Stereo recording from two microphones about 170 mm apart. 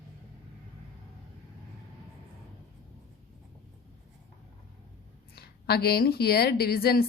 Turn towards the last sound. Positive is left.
turn(degrees=65)  # may be behind; listen again after turning